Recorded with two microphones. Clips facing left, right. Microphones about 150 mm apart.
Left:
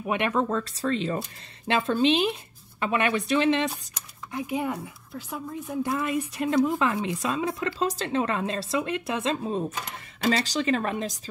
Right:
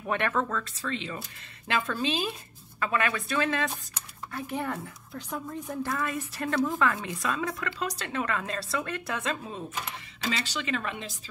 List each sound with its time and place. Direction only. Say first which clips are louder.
0.0 s speech: left 3 dB; 15° left (ahead or behind)
0.5 s speech: left 6 dB; 35° left (ahead or behind)
1.7 s a woman's voice: left 7 dB; 30° left (ahead or behind); by 5.9 s 10° left (ahead or behind)
5.9 s a woman's voice: left 4 dB; 20° left (ahead or behind); by 11.1 s 40° left (ahead or behind)